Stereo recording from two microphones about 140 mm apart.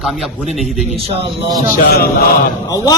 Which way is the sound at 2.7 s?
25° left (ahead or behind).